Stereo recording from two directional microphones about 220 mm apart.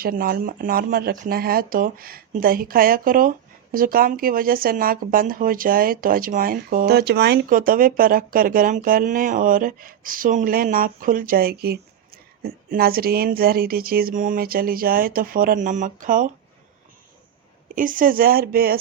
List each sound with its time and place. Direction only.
0.0 s speech: 40° right (ahead or behind)
17.7 s speech: 40° right (ahead or behind)